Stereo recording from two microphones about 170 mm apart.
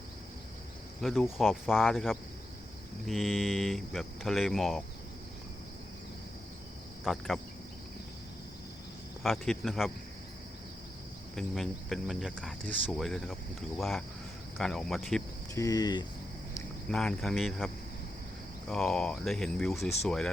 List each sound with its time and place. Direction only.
1.0 s speech: centre (ahead or behind)
7.0 s speech: centre (ahead or behind)
9.2 s speech: centre (ahead or behind)
11.3 s speech: centre (ahead or behind)
15.5 s speech: 20° left (ahead or behind)
16.9 s speech: 5° left (ahead or behind)
18.7 s speech: 5° left (ahead or behind)